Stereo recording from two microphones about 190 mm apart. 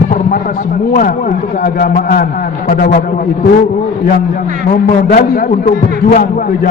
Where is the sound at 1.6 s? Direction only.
50° left (ahead or behind).